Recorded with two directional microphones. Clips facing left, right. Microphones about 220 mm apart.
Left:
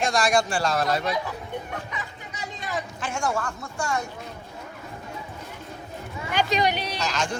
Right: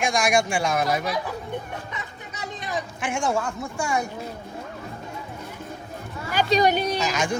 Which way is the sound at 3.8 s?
10° right (ahead or behind).